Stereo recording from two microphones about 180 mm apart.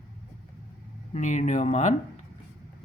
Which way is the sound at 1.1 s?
40° left (ahead or behind).